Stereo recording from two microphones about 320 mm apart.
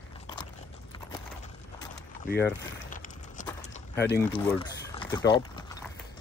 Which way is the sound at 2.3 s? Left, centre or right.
Left.